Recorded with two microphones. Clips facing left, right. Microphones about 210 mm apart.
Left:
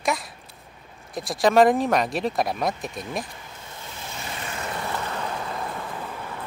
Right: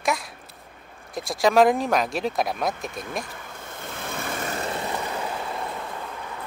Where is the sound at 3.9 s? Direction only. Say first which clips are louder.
Right 5 dB; 55° right (ahead or behind).